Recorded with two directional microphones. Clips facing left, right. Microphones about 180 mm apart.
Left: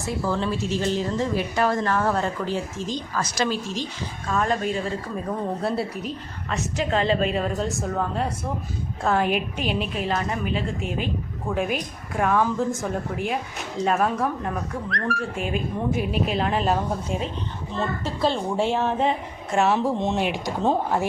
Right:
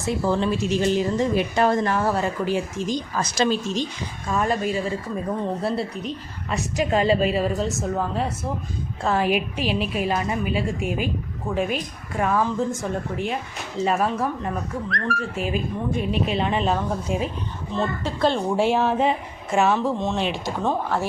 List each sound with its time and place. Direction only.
0.0 s a woman's voice: 20° right (ahead or behind)
4.3 s a woman's voice: 5° right (ahead or behind)
6.5 s a woman's voice: 10° right (ahead or behind)
19.7 s speech: 15° left (ahead or behind)